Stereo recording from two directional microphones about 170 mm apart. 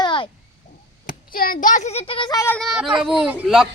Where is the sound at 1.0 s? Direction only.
55° left (ahead or behind); by 2.5 s 20° left (ahead or behind).